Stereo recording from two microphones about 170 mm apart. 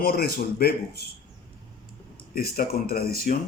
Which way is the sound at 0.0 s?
65° left (ahead or behind).